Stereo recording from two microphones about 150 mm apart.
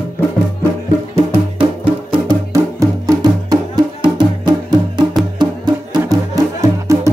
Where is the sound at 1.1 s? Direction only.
35° right (ahead or behind).